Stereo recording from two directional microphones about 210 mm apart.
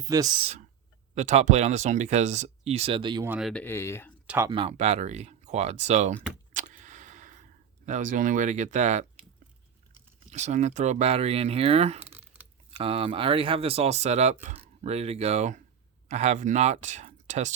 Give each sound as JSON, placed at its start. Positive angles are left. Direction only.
{"t": 0.0, "sound": "speech", "side_deg": -15}
{"t": 1.1, "sound": "speech", "side_deg": -35}
{"t": 3.2, "sound": "speech", "side_deg": -5}
{"t": 3.5, "sound": "speech", "side_deg": 10}
{"t": 4.3, "sound": "speech", "side_deg": -15}
{"t": 4.5, "sound": "speech", "side_deg": -30}
{"t": 6.5, "sound": "a sound", "side_deg": -35}
{"t": 7.9, "sound": "speech", "side_deg": -35}
{"t": 10.3, "sound": "speech", "side_deg": -35}